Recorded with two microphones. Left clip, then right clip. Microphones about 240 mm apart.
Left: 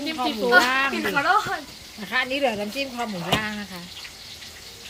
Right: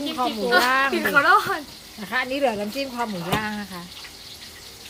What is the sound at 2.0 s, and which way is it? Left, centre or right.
Speech, centre.